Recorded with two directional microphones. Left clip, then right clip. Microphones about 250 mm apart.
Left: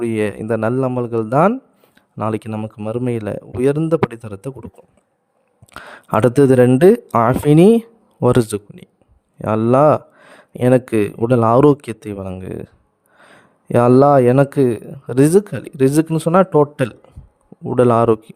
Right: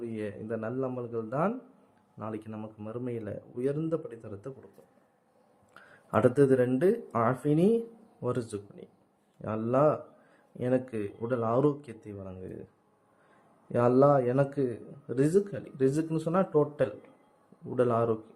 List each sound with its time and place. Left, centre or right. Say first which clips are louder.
0.0 s speech: left 17 dB; left
5.7 s speech: left 11 dB; left
13.7 s speech: left 12 dB; left